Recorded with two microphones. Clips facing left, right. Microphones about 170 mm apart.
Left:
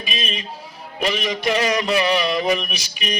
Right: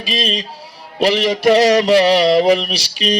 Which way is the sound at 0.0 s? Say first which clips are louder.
Right 7 dB; 80° right.